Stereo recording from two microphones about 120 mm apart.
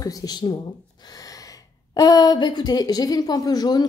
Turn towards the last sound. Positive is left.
turn(degrees=35)  # may be behind; listen again after turning